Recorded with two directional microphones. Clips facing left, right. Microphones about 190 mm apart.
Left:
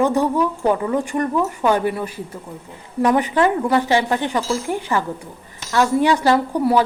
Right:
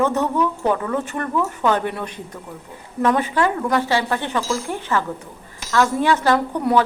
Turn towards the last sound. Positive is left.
turn(degrees=10)  # may be behind; listen again after turning